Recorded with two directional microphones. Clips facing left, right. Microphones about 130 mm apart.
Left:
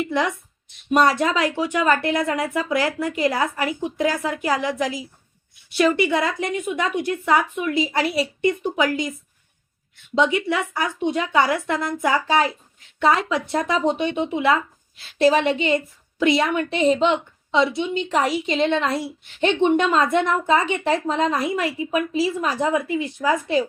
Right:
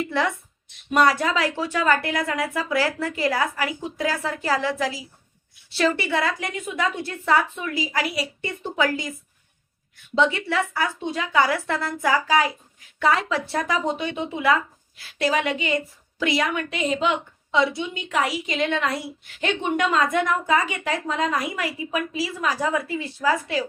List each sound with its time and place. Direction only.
0.0 s a woman's voice: 15° left (ahead or behind)
10.2 s a woman's voice: 15° left (ahead or behind)